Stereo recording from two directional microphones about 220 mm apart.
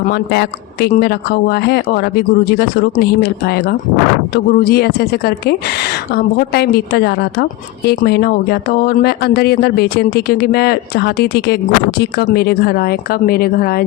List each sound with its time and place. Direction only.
0.0 s speech: 45° left (ahead or behind)